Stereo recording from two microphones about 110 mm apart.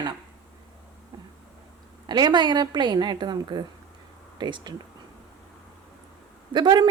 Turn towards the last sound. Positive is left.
turn(degrees=-40)  # may be behind; listen again after turning